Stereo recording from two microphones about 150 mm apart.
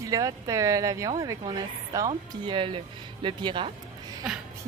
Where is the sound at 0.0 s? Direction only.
25° right (ahead or behind).